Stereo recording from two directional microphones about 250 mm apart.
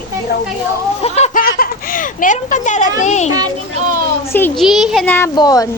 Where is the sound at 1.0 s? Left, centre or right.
Left.